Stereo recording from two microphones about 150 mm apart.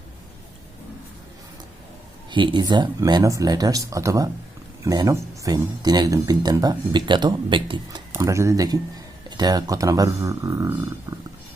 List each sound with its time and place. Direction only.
2.3 s speech: 30° right (ahead or behind)
8.1 s speech: 20° right (ahead or behind)